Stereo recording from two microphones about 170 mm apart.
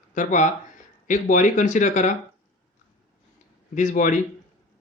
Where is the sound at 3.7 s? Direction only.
50° left (ahead or behind).